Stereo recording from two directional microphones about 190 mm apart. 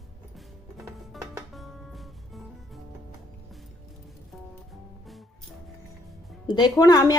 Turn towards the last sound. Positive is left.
turn(degrees=20)  # may be behind; listen again after turning